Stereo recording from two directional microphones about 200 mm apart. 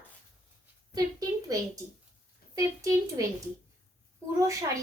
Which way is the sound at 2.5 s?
15° right (ahead or behind).